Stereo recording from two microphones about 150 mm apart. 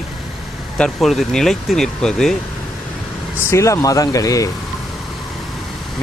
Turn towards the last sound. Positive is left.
turn(degrees=25)  # may be behind; listen again after turning